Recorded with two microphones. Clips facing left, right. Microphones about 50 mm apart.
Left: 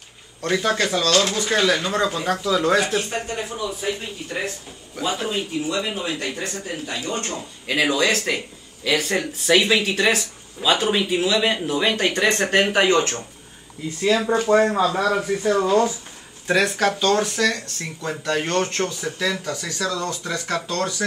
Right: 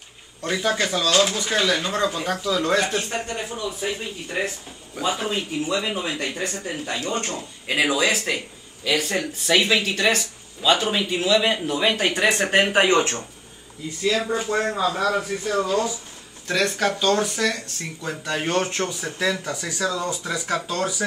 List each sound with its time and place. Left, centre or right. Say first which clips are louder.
0.4 s speech: left 2 dB; centre
14.5 s speech: left 9 dB; centre
15.6 s speech: left 4 dB; left
16.4 s speech: left 3 dB; centre